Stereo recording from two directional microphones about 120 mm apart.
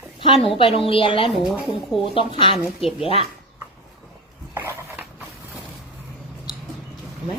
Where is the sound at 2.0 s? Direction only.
45° left (ahead or behind).